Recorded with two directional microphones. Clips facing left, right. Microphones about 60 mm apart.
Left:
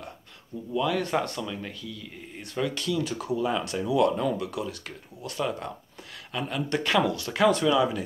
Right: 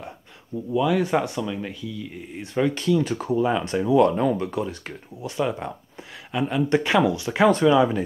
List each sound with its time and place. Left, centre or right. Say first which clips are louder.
0.7 s speech: right 5 dB; centre
2.5 s speech: right 7 dB; right
5.2 s speech: right 4 dB; right
7.4 s speech: right 5 dB; right